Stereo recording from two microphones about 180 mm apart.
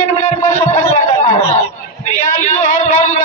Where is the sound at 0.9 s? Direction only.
40° left (ahead or behind).